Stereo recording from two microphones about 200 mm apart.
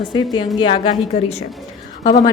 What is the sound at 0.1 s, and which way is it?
A woman's voice, 20° left (ahead or behind).